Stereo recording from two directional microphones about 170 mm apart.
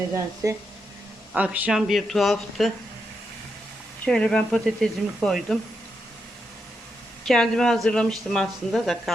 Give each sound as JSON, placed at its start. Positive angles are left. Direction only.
{"t": 0.4, "sound": "speech", "side_deg": -20}
{"t": 1.3, "sound": "speech", "side_deg": -10}
{"t": 4.0, "sound": "speech", "side_deg": 5}
{"t": 7.3, "sound": "speech", "side_deg": 0}